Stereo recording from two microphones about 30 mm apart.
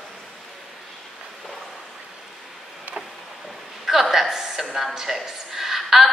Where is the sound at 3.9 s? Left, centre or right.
Centre.